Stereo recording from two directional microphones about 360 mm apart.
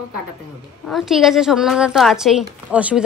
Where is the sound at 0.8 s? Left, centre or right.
Centre.